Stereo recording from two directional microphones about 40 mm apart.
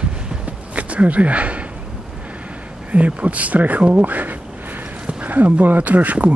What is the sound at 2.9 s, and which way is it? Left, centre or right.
Speech, right.